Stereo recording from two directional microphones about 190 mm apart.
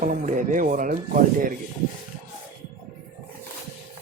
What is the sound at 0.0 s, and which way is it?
Speech, 45° right (ahead or behind).